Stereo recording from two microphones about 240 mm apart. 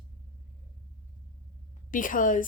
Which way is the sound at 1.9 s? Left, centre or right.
Left.